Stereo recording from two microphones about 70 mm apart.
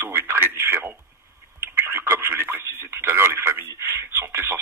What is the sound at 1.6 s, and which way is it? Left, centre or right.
Telephone, right.